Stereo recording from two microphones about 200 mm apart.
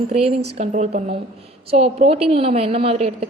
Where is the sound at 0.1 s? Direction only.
30° right (ahead or behind).